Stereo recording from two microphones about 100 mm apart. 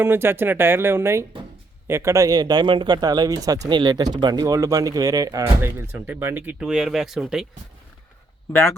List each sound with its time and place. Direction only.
0.0 s speech: 20° right (ahead or behind)
5.4 s speech: 25° right (ahead or behind); by 7.4 s 5° right (ahead or behind)